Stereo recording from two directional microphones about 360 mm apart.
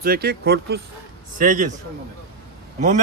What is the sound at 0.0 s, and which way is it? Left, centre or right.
Speech, right.